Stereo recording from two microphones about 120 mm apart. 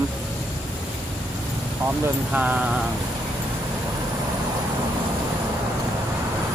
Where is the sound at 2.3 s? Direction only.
10° right (ahead or behind).